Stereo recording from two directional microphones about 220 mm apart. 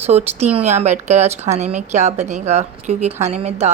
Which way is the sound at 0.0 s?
30° right (ahead or behind).